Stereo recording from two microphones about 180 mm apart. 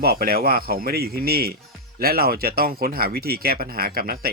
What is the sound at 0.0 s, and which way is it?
Speech, 60° right (ahead or behind).